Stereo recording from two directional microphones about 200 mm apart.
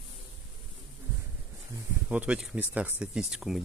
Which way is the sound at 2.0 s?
5° right (ahead or behind).